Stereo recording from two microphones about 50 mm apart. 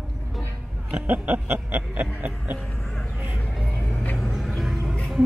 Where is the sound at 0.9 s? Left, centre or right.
Right.